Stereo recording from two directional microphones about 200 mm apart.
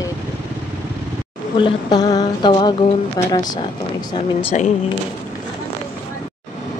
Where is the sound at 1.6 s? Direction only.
25° left (ahead or behind).